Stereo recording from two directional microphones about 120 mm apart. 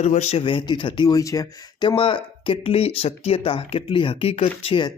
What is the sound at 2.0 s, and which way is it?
Speech, 45° left (ahead or behind).